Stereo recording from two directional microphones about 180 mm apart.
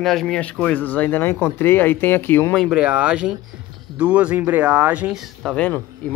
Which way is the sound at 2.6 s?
5° right (ahead or behind).